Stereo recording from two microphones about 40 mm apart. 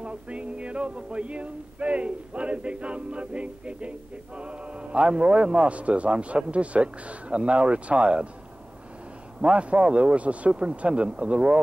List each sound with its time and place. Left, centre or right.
0.0 s a sound: right
4.4 s a man's voice: right
9.4 s a man's voice: right